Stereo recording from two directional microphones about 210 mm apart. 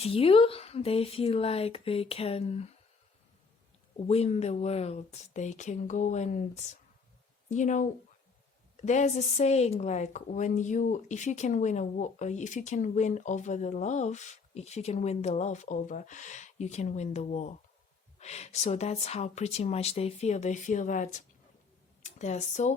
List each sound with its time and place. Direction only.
0.0 s speech: 25° left (ahead or behind)
4.0 s a woman's voice: 30° left (ahead or behind)
7.5 s a woman's voice: 35° left (ahead or behind)